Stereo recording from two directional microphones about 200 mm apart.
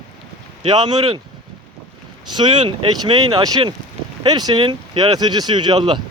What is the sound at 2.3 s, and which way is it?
Speech, 25° right (ahead or behind).